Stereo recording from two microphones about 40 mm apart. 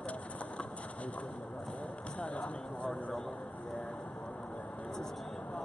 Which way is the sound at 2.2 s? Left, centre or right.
Left.